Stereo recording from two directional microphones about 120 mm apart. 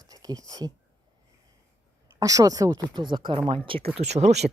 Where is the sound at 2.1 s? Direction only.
30° right (ahead or behind); by 3.9 s 50° right (ahead or behind).